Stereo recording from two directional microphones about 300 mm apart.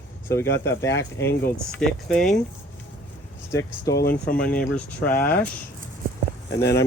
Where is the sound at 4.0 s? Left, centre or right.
Left.